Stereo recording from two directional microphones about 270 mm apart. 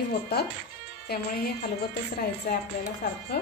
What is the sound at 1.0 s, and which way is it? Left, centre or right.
A woman's voice, left.